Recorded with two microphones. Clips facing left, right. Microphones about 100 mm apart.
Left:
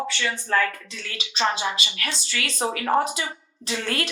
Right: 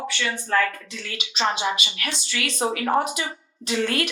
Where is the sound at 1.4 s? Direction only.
25° right (ahead or behind).